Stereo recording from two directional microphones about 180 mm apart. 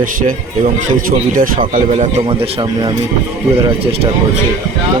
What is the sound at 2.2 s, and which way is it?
Speech, 30° right (ahead or behind).